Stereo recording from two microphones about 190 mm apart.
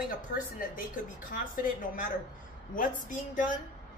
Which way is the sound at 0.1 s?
50° left (ahead or behind).